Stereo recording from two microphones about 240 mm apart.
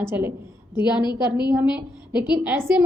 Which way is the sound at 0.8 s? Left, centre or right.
Centre.